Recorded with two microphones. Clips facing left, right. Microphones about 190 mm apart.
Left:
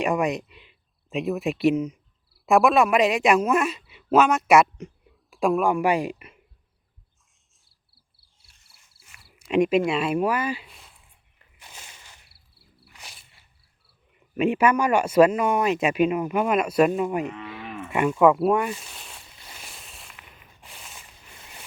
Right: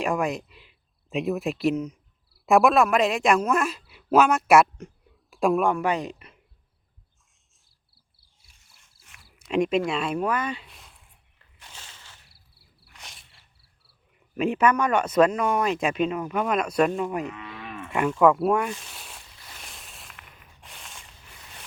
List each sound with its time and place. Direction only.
0.0 s a woman's voice: centre (ahead or behind)
5.7 s speech: 10° left (ahead or behind)
8.7 s a sound: centre (ahead or behind)
9.4 s speech: 5° left (ahead or behind)
11.3 s a sound: 10° left (ahead or behind)
14.3 s speech: 5° left (ahead or behind)
17.2 s moo: 25° left (ahead or behind)
17.8 s speech: 5° left (ahead or behind)
19.5 s a sound: centre (ahead or behind)